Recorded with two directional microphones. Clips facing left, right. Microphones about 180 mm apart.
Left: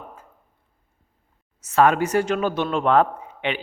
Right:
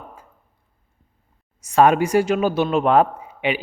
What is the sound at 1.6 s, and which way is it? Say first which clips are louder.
A man's voice: right 3 dB; 15° right (ahead or behind).